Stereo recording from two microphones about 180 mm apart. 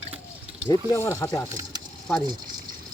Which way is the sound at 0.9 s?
15° left (ahead or behind).